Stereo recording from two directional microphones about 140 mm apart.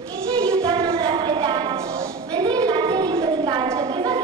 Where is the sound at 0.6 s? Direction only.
35° right (ahead or behind).